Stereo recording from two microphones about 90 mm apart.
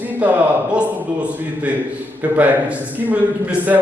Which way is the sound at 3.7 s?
20° right (ahead or behind).